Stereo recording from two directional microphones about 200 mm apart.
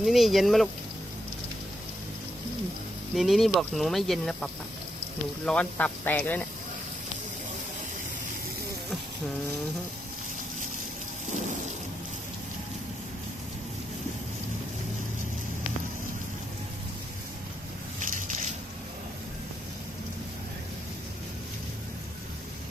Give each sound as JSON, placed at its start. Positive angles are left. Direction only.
{"t": 0.0, "sound": "speech", "side_deg": 0}
{"t": 3.2, "sound": "speech", "side_deg": 0}
{"t": 5.5, "sound": "speech", "side_deg": 5}
{"t": 18.0, "sound": "a sound", "side_deg": -40}